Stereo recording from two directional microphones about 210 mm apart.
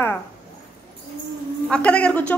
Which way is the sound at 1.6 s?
5° left (ahead or behind).